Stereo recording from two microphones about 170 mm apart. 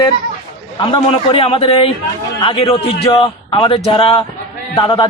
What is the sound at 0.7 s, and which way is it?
A man's voice, 30° left (ahead or behind).